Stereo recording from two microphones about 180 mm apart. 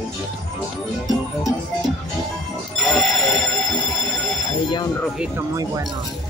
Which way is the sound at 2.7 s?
Centre (ahead or behind).